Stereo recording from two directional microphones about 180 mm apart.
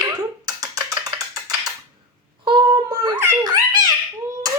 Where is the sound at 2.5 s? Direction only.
25° right (ahead or behind).